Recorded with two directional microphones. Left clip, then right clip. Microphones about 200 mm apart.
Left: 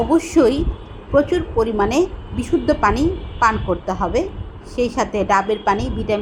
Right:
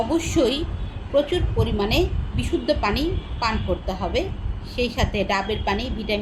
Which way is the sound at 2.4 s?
Centre (ahead or behind).